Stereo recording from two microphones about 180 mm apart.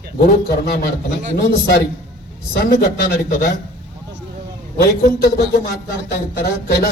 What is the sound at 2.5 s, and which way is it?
Speech, 55° left (ahead or behind).